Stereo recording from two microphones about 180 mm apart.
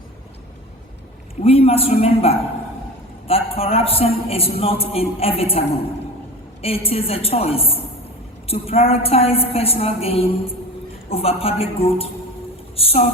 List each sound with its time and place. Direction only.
1.4 s a man's voice: 35° left (ahead or behind)
12.7 s music: 35° left (ahead or behind)